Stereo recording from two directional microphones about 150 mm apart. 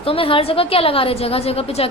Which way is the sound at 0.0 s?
35° left (ahead or behind).